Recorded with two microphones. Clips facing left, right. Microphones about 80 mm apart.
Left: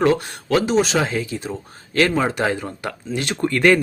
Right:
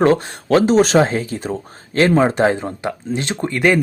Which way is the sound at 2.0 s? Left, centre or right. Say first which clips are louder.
Right 5 dB; right.